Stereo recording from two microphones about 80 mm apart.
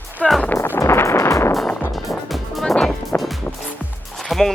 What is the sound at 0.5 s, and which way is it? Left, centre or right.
Music, left.